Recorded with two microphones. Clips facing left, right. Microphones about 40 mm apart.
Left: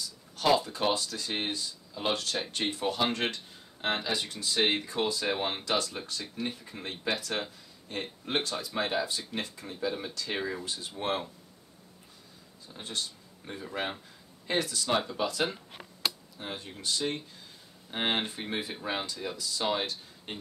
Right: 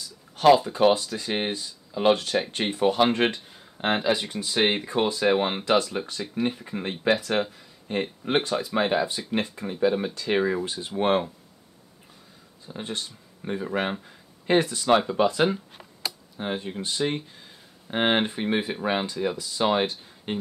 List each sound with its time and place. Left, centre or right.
0.7 s speech: right
12.6 s speech: right